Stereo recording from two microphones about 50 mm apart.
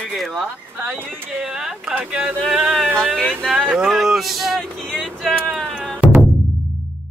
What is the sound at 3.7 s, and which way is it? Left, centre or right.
Speech, centre.